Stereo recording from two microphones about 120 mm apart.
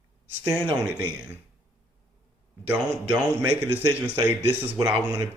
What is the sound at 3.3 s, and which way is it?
Speech, 20° left (ahead or behind).